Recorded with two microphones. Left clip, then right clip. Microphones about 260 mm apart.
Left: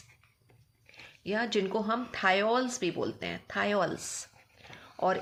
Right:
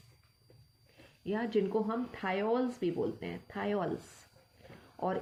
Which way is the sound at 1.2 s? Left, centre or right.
Left.